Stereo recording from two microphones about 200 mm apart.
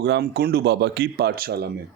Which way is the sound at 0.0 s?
55° right (ahead or behind).